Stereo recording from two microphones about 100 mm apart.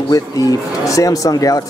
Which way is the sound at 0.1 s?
35° left (ahead or behind).